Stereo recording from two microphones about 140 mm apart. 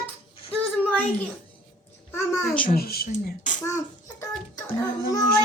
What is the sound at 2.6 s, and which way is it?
Speech, 90° left.